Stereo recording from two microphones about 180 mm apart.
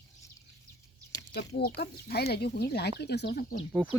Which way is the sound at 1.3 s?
60° left (ahead or behind).